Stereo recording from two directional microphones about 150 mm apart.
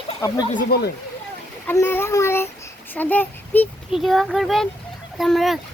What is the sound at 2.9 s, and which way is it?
Speech, 10° left (ahead or behind).